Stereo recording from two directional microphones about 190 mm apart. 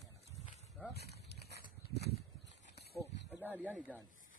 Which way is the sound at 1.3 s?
60° left (ahead or behind).